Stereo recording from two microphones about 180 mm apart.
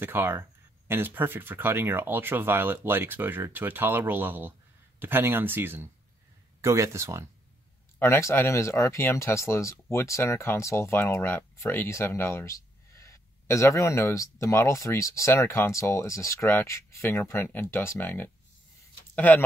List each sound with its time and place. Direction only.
0.0 s speech: 10° right (ahead or behind)
8.0 s speech: 15° left (ahead or behind)